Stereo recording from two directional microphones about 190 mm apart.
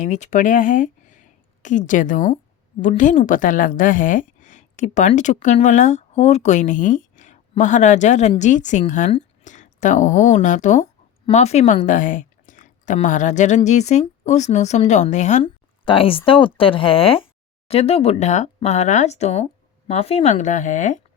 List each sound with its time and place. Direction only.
0.0 s a woman's voice: 40° left (ahead or behind)